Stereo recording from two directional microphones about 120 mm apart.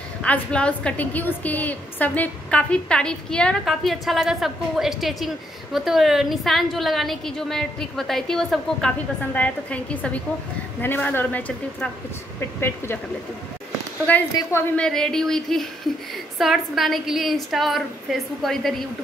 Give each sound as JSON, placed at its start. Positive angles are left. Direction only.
{"t": 0.2, "sound": "a woman's voice", "side_deg": 10}
{"t": 9.2, "sound": "speech", "side_deg": 15}
{"t": 14.1, "sound": "a woman's voice", "side_deg": 15}